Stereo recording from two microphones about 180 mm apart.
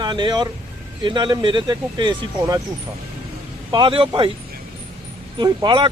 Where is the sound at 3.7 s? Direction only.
25° right (ahead or behind).